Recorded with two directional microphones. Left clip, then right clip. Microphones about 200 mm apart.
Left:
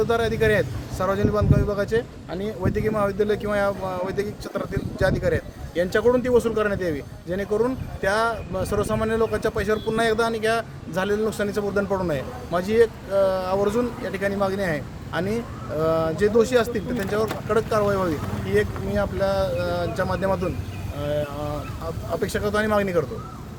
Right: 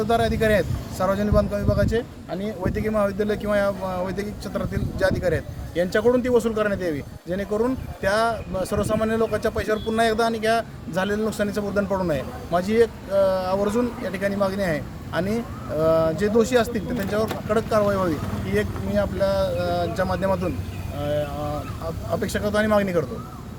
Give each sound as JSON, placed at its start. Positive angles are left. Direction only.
{"t": 0.0, "sound": "speech", "side_deg": 5}